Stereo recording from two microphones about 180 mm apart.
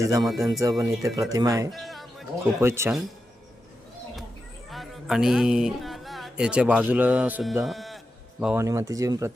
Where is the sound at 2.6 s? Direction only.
15° right (ahead or behind).